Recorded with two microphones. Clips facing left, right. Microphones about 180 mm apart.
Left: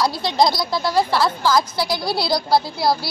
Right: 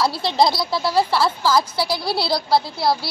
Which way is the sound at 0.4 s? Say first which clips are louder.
Even; 5° right (ahead or behind).